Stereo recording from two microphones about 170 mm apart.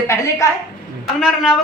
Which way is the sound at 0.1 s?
15° left (ahead or behind).